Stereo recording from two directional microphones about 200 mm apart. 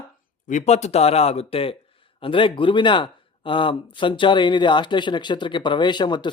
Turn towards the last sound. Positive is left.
turn(degrees=20)  # may be behind; listen again after turning